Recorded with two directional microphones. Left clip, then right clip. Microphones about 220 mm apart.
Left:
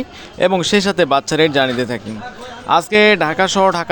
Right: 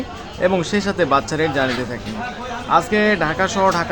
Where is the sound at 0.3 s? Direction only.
40° left (ahead or behind).